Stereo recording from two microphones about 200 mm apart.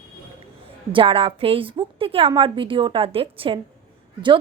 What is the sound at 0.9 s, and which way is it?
A woman's voice, 25° right (ahead or behind).